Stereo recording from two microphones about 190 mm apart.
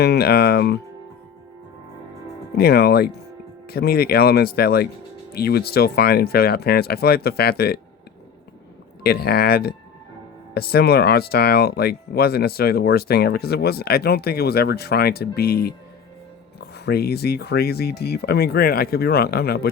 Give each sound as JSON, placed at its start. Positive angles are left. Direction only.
{"t": 0.0, "sound": "speech", "side_deg": 60}
{"t": 2.6, "sound": "speech", "side_deg": 55}
{"t": 9.0, "sound": "speech", "side_deg": 55}